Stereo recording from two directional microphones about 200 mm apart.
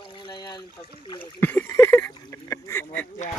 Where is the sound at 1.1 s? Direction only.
10° left (ahead or behind).